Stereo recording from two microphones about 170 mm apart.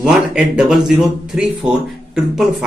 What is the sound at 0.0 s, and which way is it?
Speech, 5° right (ahead or behind).